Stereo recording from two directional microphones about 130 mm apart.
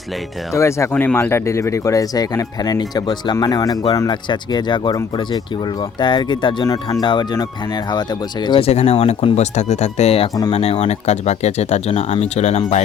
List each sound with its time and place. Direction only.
0.5 s speech: 20° left (ahead or behind)
8.6 s speech: 55° left (ahead or behind)